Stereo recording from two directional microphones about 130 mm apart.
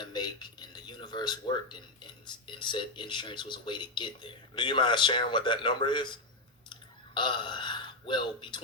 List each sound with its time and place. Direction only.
0.0 s speech: 35° left (ahead or behind)